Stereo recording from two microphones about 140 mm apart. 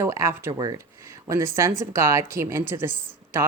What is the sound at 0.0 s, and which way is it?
Speech, 20° right (ahead or behind).